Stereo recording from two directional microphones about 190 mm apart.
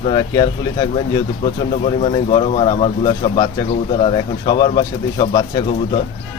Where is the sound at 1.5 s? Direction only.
35° left (ahead or behind).